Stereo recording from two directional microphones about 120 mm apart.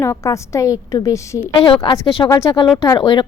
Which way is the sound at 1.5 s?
50° left (ahead or behind).